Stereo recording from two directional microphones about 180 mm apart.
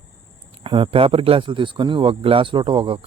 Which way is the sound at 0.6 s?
30° right (ahead or behind).